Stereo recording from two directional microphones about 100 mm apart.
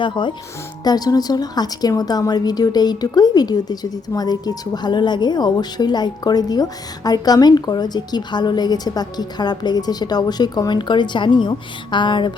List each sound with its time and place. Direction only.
0.0 s a woman's voice: 55° left (ahead or behind)
0.9 s a woman's voice: 40° left (ahead or behind)